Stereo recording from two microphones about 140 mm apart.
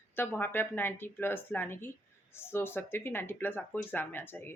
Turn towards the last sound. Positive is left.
turn(degrees=15)  # may be behind; listen again after turning